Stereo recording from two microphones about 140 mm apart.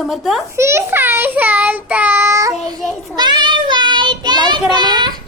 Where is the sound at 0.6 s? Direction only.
20° right (ahead or behind).